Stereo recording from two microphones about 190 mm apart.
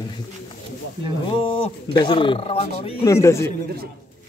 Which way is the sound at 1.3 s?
25° left (ahead or behind).